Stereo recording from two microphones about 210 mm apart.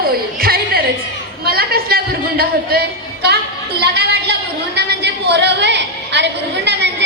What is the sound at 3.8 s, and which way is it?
Speech, 50° right (ahead or behind).